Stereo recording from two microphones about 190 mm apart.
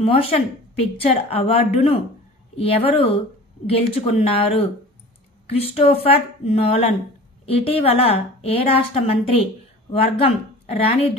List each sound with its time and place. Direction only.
0.0 s a woman's voice: 30° left (ahead or behind)